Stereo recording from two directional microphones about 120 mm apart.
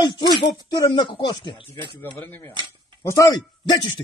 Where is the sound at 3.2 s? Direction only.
30° left (ahead or behind).